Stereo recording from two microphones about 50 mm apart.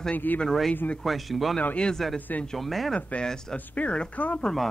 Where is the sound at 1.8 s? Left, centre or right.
Centre.